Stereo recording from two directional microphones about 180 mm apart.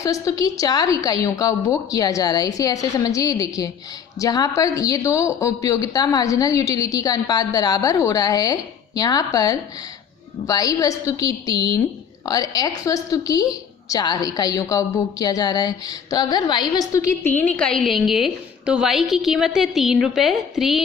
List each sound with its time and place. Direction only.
0.0 s a woman's voice: 20° left (ahead or behind); by 20.8 s centre (ahead or behind)